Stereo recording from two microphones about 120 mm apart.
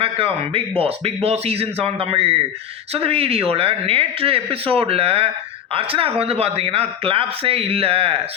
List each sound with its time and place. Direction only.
0.0 s speech: 50° right (ahead or behind)